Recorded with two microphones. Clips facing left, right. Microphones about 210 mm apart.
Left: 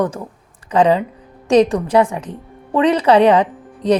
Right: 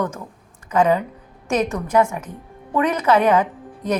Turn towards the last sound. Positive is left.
turn(degrees=35)  # may be behind; listen again after turning